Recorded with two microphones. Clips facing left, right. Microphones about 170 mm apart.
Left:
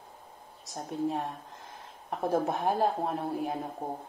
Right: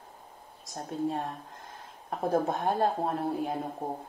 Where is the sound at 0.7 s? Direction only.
Centre (ahead or behind).